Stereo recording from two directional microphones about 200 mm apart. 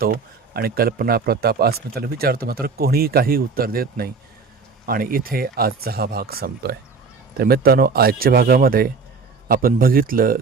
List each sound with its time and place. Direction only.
0.0 s speech: 50° right (ahead or behind)